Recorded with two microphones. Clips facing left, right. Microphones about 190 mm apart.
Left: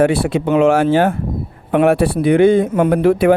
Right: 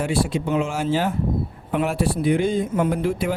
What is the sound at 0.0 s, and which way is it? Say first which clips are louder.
A man's voice: left 8 dB; 60° left (ahead or behind).